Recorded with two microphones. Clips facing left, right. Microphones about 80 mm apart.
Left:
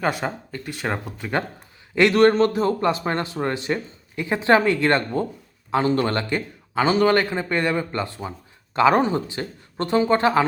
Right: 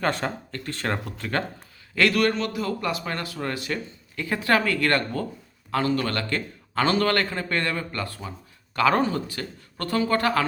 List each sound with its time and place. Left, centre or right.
0.0 s a man's voice: centre